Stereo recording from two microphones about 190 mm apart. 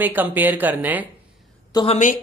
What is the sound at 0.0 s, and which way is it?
Speech, 10° right (ahead or behind).